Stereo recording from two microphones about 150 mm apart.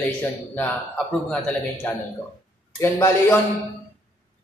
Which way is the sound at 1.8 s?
10° left (ahead or behind).